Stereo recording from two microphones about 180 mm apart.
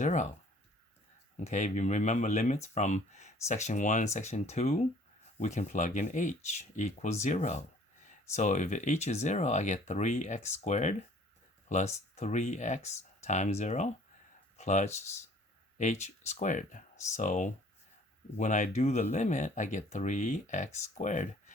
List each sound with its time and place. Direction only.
0.0 s speech: 40° left (ahead or behind)
1.5 s speech: 40° left (ahead or behind)